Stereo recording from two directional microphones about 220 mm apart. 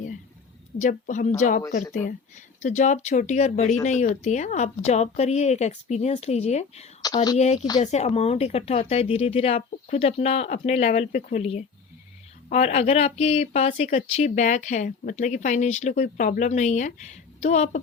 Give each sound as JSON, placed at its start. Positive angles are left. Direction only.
{"t": 0.8, "sound": "speech", "side_deg": 35}